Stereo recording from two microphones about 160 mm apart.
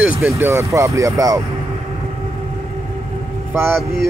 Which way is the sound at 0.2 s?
15° right (ahead or behind).